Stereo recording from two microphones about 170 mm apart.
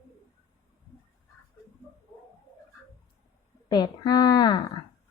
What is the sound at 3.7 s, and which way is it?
Speech, 25° left (ahead or behind).